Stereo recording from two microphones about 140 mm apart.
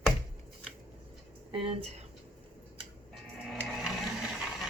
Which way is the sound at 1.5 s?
45° right (ahead or behind).